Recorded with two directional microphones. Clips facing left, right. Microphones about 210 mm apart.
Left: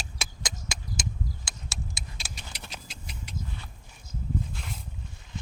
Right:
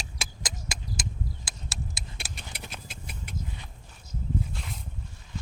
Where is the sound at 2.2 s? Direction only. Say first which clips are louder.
Right 2 dB; 55° right (ahead or behind).